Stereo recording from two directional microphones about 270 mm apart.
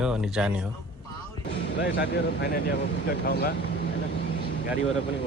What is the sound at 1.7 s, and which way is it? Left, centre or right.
Speech, left.